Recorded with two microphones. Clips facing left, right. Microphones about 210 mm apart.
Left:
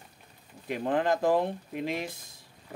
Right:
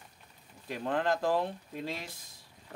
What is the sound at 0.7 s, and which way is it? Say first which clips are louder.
Speech: left 4 dB; 15° left (ahead or behind).